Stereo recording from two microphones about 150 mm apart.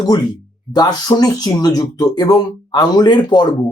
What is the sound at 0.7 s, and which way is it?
Speech, 25° left (ahead or behind).